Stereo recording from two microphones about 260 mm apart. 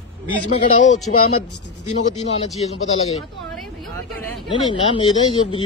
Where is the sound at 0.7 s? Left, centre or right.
Left.